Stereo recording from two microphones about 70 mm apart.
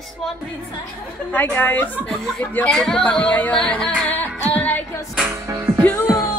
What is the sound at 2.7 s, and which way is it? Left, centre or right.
Speech, centre.